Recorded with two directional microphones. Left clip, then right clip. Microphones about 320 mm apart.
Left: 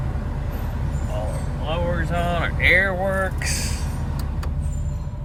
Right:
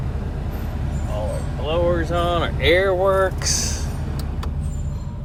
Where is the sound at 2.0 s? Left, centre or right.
Centre.